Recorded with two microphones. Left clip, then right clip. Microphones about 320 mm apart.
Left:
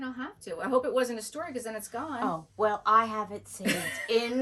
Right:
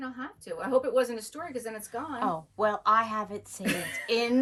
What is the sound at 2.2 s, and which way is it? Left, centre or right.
Speech, right.